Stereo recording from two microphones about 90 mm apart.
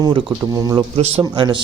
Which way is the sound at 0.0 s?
65° right (ahead or behind).